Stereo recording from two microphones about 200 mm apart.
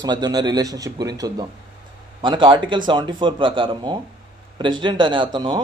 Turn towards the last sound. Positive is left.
turn(degrees=-20)  # may be behind; listen again after turning